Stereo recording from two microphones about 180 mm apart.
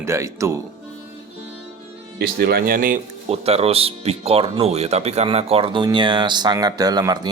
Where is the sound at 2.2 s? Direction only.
60° right (ahead or behind).